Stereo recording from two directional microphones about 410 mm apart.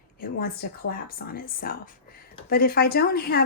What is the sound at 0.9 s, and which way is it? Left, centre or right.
Speech, left.